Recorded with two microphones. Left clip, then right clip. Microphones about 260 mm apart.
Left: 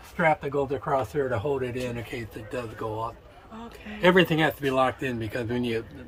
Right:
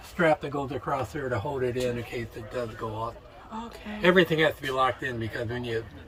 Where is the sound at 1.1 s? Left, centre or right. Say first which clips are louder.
Left 4 dB; left.